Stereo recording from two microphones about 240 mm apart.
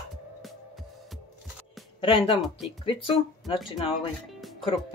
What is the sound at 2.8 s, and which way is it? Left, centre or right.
Speech, left.